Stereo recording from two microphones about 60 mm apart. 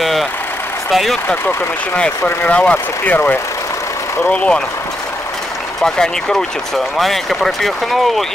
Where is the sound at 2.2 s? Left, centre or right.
Left.